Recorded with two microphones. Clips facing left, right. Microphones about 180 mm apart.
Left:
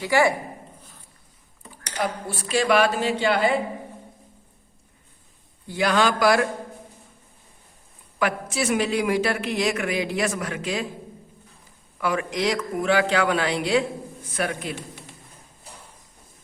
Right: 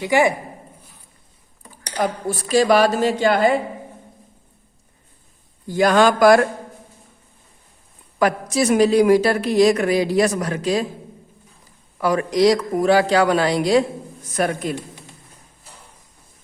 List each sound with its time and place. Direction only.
0.0 s speech: 20° right (ahead or behind)
1.8 s a man's voice: 40° right (ahead or behind)
5.6 s a man's voice: 45° right (ahead or behind)
8.2 s a man's voice: 40° right (ahead or behind)
11.9 s a man's voice: 40° right (ahead or behind)